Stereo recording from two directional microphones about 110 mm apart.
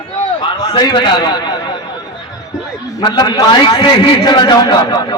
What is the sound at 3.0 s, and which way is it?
A man's voice, 40° left (ahead or behind).